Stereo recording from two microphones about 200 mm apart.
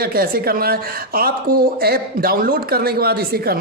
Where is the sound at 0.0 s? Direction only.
50° right (ahead or behind).